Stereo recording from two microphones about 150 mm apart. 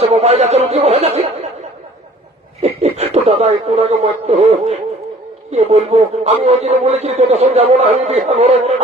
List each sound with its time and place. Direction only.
0.0 s speech: 45° right (ahead or behind)
2.6 s a man's voice: 45° right (ahead or behind)